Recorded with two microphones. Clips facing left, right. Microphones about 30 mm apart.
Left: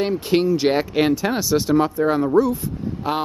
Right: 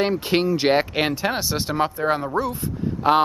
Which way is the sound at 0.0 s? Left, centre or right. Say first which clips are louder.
Left 1 dB; centre.